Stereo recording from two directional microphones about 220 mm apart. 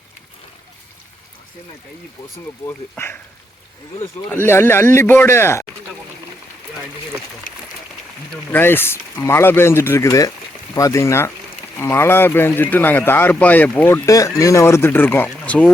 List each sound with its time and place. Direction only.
2.6 s speech: 10° left (ahead or behind)
4.3 s speech: 10° left (ahead or behind)
7.5 s a sound: 40° left (ahead or behind)
8.5 s speech: 10° left (ahead or behind)